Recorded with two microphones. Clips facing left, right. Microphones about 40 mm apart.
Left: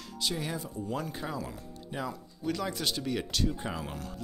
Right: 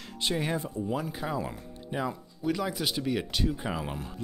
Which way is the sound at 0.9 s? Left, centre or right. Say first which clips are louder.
Right 3 dB; centre.